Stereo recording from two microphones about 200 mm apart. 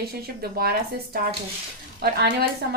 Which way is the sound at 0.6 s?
50° right (ahead or behind).